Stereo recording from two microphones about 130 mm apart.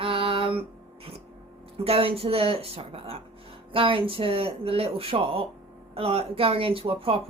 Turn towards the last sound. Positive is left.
turn(degrees=-45)  # may be behind; listen again after turning